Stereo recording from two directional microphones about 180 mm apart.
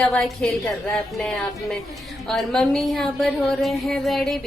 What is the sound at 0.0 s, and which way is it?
A woman's voice, 5° left (ahead or behind).